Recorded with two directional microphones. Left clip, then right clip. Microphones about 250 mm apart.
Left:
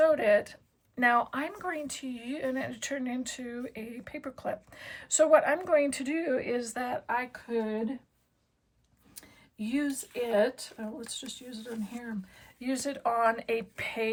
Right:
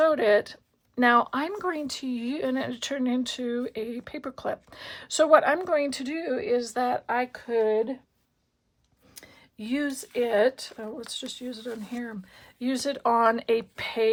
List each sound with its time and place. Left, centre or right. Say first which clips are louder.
0.0 s speech: right 3 dB; centre
9.6 s speech: right 3 dB; right